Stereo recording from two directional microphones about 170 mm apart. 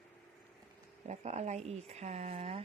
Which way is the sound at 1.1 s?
40° right (ahead or behind).